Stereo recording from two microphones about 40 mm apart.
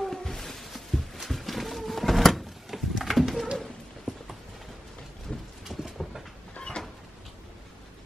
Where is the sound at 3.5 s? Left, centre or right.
Centre.